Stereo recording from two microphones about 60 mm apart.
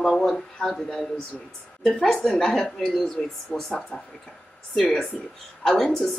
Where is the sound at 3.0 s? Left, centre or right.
Centre.